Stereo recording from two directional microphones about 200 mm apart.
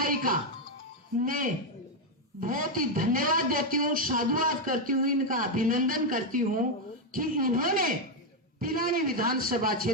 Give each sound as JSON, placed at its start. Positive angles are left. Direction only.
{"t": 0.0, "sound": "music", "side_deg": -45}
{"t": 1.2, "sound": "a man's voice", "side_deg": -45}